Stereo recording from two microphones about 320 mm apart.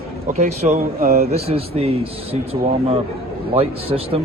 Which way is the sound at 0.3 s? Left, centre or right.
Right.